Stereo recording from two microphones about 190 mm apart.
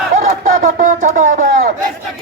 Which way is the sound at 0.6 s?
45° right (ahead or behind).